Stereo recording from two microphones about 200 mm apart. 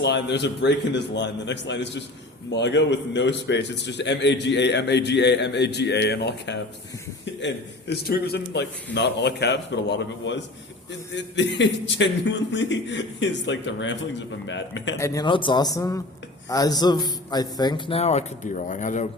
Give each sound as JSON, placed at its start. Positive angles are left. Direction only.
{"t": 0.0, "sound": "a man's voice", "side_deg": 60}
{"t": 14.9, "sound": "a man's voice", "side_deg": 15}